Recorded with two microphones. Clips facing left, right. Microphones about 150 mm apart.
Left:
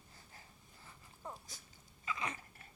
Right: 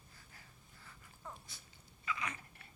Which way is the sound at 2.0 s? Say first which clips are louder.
Even; 25° left (ahead or behind).